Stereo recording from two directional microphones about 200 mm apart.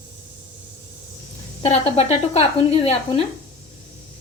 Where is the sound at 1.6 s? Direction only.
30° left (ahead or behind).